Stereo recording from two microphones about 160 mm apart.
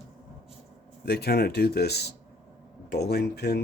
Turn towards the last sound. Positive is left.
turn(degrees=90)